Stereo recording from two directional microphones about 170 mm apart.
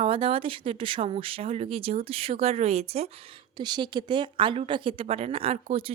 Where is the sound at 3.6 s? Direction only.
25° right (ahead or behind).